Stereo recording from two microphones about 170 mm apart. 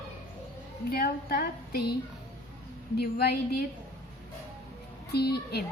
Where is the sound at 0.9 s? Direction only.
65° left (ahead or behind).